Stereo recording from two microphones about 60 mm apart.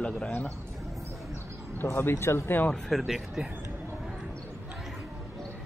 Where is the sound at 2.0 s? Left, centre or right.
Left.